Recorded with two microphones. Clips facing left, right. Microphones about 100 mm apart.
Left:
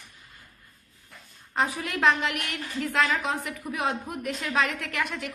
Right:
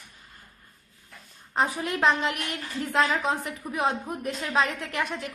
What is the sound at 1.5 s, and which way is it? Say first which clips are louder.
A woman's voice: right 1 dB; 35° right (ahead or behind).